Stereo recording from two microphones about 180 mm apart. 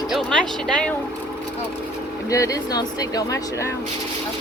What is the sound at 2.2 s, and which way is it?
Speech, 20° left (ahead or behind).